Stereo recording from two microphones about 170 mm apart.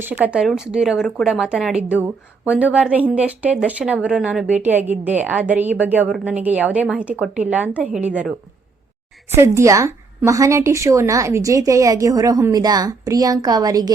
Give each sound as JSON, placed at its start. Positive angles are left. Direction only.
{"t": 0.0, "sound": "speech", "side_deg": -10}
{"t": 9.3, "sound": "speech", "side_deg": -15}